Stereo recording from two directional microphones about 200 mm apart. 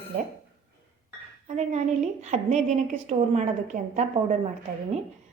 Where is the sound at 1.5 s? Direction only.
35° right (ahead or behind).